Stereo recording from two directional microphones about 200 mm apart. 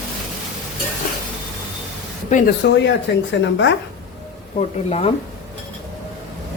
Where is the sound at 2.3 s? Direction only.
40° left (ahead or behind).